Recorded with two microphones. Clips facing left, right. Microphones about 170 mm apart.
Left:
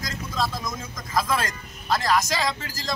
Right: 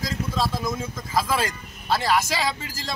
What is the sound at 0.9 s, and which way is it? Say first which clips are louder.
Speech: left 1 dB; 5° right (ahead or behind).